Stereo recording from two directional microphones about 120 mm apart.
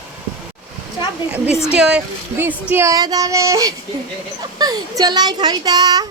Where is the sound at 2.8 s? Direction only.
30° right (ahead or behind).